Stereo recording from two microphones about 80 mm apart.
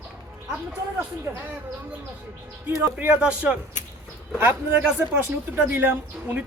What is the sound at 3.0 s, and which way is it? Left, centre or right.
A woman's voice, centre.